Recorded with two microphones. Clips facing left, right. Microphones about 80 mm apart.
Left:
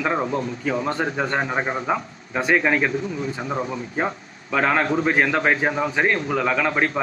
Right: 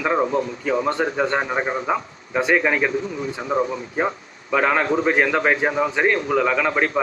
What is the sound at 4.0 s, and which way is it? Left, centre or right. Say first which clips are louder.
A man's voice: right 3 dB; centre.